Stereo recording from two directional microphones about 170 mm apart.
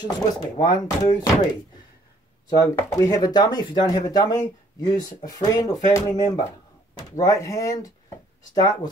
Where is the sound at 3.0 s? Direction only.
20° left (ahead or behind).